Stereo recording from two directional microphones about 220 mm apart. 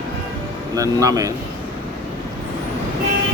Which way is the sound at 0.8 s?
15° right (ahead or behind).